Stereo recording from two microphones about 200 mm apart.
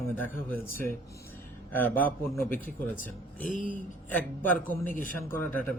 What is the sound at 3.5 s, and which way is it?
Speech, 40° left (ahead or behind).